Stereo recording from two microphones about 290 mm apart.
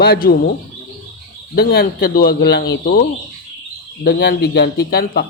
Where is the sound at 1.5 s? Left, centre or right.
Left.